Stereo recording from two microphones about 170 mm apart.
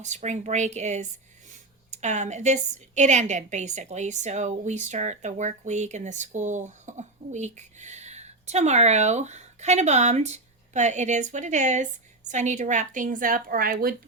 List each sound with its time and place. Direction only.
0.0 s a woman's voice: 45° right (ahead or behind); by 13.9 s 60° right (ahead or behind)